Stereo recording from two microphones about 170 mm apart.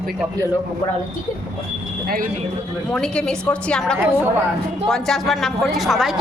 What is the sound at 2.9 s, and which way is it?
A woman's voice, 5° left (ahead or behind).